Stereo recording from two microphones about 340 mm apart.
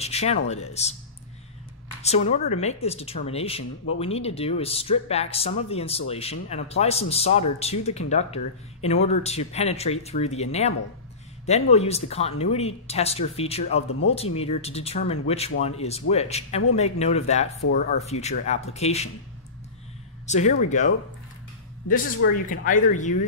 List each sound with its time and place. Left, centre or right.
0.0 s speech: centre
2.0 s speech: centre
20.2 s speech: left